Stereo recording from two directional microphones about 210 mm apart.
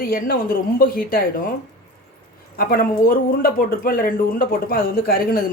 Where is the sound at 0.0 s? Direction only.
45° left (ahead or behind).